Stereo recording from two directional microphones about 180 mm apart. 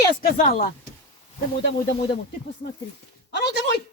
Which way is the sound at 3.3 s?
65° left (ahead or behind).